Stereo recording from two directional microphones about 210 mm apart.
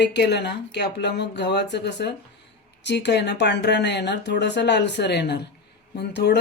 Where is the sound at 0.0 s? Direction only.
55° left (ahead or behind).